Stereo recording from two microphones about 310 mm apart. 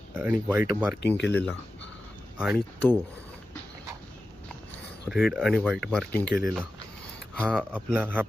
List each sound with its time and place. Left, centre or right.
0.1 s speech: centre
1.0 s speech: left
1.3 s speech: centre
5.0 s speech: centre